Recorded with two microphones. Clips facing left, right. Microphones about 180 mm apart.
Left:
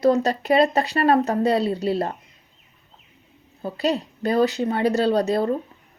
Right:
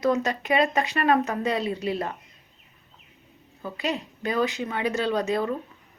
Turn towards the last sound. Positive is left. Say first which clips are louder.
# left 5 dB
turn(degrees=35)  # may be behind; listen again after turning